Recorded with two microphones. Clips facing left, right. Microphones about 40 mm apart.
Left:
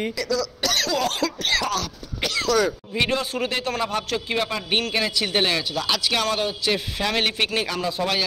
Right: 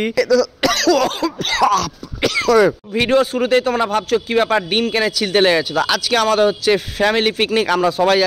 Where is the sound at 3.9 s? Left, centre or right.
Right.